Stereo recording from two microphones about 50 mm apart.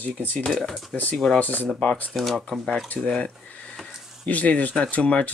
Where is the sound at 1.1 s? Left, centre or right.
Centre.